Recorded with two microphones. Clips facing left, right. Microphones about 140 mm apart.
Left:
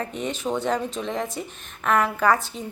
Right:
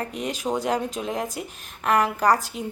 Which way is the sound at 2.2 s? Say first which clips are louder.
Even; 40° right (ahead or behind).